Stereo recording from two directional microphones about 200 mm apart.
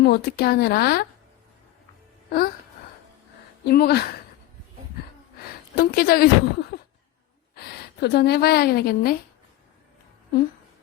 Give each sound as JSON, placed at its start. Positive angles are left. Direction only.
{"t": 0.0, "sound": "speech", "side_deg": 55}
{"t": 3.7, "sound": "speech", "side_deg": 50}
{"t": 5.5, "sound": "a woman's voice", "side_deg": 50}